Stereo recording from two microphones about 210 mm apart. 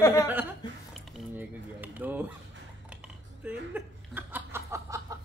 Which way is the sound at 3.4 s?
10° right (ahead or behind).